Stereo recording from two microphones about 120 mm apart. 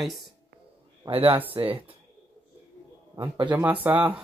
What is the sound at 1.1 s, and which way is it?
Speech, 45° right (ahead or behind).